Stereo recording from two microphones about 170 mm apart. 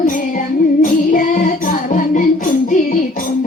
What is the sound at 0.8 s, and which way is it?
Music, 50° left (ahead or behind).